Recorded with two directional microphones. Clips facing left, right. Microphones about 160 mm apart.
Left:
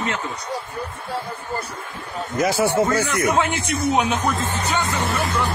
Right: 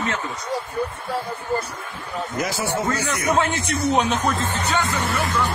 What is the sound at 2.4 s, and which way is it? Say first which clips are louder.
Speech: left 7 dB; 55° left (ahead or behind).